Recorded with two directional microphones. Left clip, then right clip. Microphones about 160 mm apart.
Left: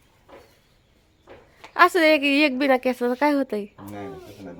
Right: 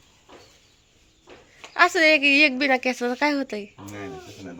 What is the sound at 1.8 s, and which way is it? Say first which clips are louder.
A woman's voice: left 1 dB; 35° left (ahead or behind).